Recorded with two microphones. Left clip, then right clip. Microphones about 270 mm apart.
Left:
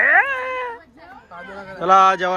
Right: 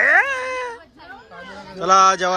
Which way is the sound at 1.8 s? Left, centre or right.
Centre.